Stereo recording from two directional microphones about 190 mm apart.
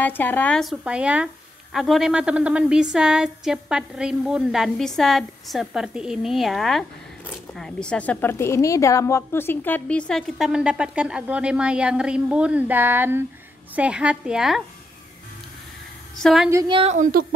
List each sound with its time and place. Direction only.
0.0 s a woman's voice: 10° left (ahead or behind)
16.2 s a woman's voice: centre (ahead or behind)
16.4 s a woman's voice: 15° right (ahead or behind)
16.7 s a woman's voice: 35° right (ahead or behind)